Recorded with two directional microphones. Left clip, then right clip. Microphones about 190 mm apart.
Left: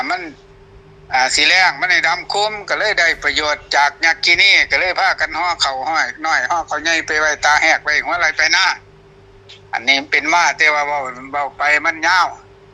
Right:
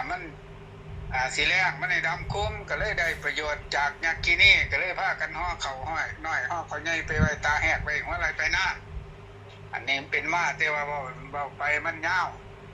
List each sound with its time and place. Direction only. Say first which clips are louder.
0.0 s a man's voice: left 12 dB; 60° left (ahead or behind)